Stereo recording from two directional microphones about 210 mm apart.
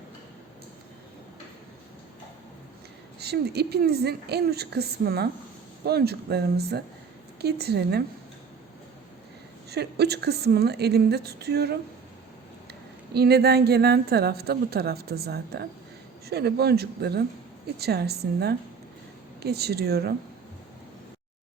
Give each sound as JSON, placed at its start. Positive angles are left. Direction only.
{"t": 3.2, "sound": "a woman's voice", "side_deg": -50}
{"t": 9.6, "sound": "a woman's voice", "side_deg": -50}
{"t": 13.1, "sound": "a woman's voice", "side_deg": -50}